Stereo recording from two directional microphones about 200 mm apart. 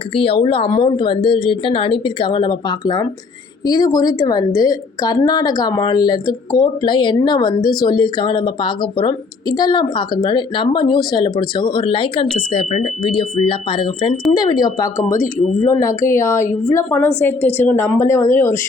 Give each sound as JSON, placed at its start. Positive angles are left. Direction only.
{"t": 0.1, "sound": "a woman's voice", "side_deg": 25}